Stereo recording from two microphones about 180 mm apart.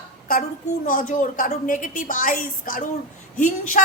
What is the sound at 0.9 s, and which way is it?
A woman's voice, 50° left (ahead or behind).